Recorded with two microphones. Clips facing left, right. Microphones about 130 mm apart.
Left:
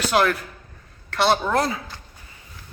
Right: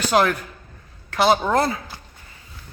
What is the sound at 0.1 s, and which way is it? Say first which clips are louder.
A woman's voice: right 2 dB; centre (ahead or behind).